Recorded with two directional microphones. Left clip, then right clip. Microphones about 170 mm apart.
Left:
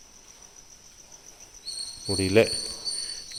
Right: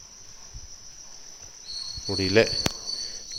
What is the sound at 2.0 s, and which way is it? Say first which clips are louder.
Speech: even; 5° left (ahead or behind).